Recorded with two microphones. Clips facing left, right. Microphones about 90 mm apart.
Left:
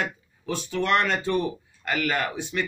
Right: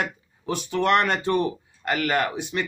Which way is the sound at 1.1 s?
60° right (ahead or behind).